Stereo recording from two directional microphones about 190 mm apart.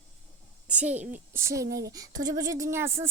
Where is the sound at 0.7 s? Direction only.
10° right (ahead or behind).